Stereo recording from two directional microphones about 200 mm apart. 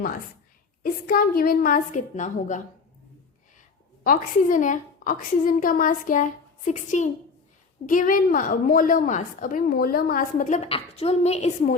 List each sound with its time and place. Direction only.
0.8 s a woman's voice: 45° left (ahead or behind)
4.0 s a woman's voice: 45° left (ahead or behind)